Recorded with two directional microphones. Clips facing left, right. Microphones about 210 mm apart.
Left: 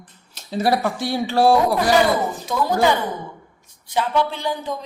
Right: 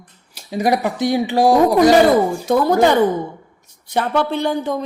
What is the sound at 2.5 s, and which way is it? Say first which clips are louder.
Speech: right 6 dB; 65° right (ahead or behind).